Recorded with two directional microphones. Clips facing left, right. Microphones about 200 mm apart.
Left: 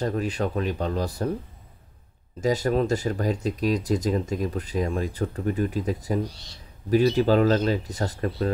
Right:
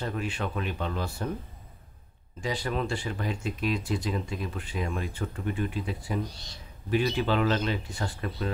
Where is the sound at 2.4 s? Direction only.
45° left (ahead or behind).